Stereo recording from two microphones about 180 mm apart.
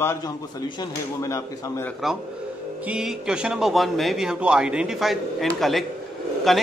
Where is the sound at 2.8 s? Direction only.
5° right (ahead or behind).